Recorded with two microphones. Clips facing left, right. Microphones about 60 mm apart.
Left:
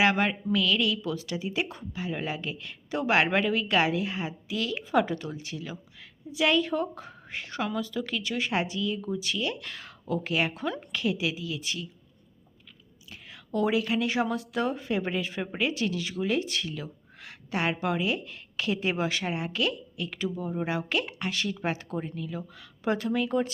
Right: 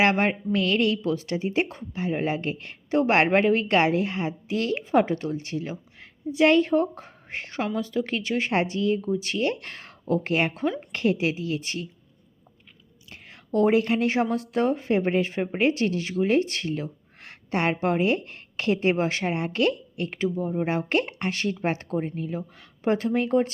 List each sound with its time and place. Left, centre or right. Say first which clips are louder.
0.0 s a woman's voice: right 3 dB; right
10.6 s a woman's voice: right 5 dB; right
10.9 s speech: right 5 dB; right
13.1 s speech: right 5 dB; right